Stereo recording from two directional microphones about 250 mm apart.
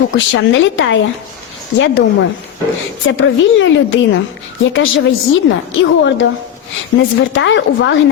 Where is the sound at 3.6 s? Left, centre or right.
Left.